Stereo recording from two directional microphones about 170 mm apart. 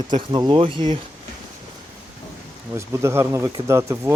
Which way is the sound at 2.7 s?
15° right (ahead or behind).